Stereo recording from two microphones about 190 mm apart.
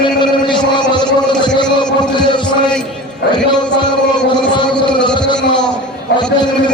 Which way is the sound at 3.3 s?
25° left (ahead or behind).